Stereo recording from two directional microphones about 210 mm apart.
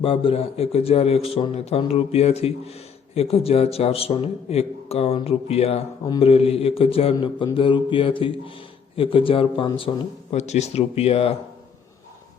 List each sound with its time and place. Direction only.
0.0 s a man's voice: 25° left (ahead or behind)